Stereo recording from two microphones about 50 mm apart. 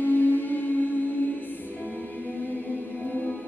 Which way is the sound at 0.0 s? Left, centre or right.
Left.